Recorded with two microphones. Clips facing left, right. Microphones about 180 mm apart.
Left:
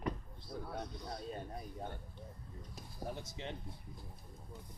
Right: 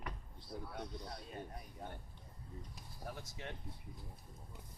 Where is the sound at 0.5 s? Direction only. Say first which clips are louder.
Left 2 dB; 20° right (ahead or behind).